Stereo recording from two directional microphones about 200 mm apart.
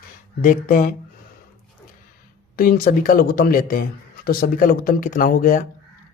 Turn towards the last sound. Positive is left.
turn(degrees=40)  # may be behind; listen again after turning